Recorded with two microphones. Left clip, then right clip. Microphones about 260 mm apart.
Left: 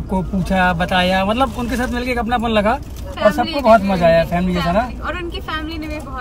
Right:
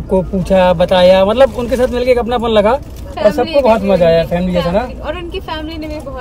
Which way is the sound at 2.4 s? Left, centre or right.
Right.